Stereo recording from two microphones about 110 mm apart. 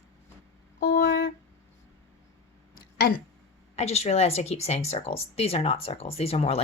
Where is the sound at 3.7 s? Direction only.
75° left (ahead or behind).